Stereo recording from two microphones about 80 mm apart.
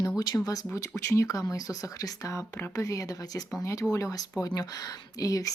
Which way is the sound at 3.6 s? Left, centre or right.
Left.